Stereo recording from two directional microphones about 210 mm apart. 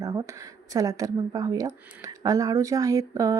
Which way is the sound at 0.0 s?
15° right (ahead or behind).